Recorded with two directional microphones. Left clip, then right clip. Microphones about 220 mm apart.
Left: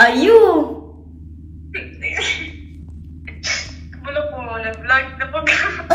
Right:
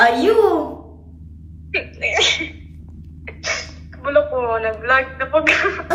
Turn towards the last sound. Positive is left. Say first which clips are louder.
# even
turn(degrees=-20)  # may be behind; listen again after turning